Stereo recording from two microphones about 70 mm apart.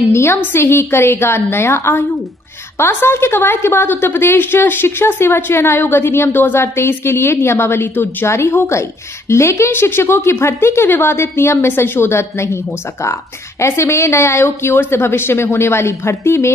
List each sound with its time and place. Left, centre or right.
0.1 s a woman's voice: left